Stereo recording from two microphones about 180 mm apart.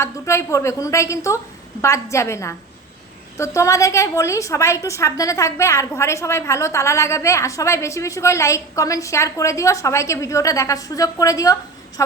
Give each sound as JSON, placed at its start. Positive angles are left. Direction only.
{"t": 0.0, "sound": "a woman's voice", "side_deg": 15}